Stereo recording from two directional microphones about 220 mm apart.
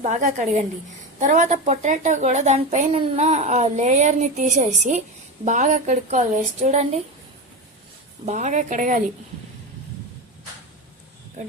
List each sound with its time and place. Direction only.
0.0 s a woman's voice: 35° right (ahead or behind)
8.2 s a woman's voice: 35° right (ahead or behind)